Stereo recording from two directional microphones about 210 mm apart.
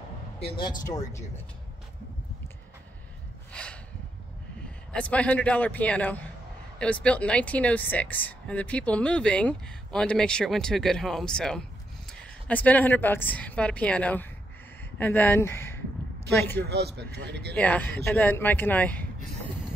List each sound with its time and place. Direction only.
0.6 s speech: 20° left (ahead or behind)
4.9 s a woman's voice: 5° left (ahead or behind)
16.6 s speech: 50° right (ahead or behind)
17.6 s a woman's voice: 10° left (ahead or behind)